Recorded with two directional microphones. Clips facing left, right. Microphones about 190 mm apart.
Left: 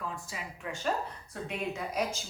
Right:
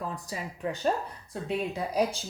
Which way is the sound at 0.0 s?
40° right (ahead or behind).